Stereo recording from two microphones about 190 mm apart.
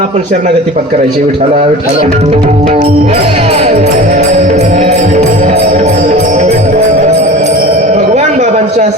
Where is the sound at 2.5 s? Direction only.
35° right (ahead or behind).